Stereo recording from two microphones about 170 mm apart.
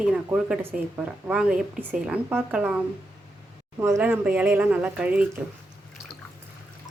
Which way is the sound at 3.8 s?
15° right (ahead or behind).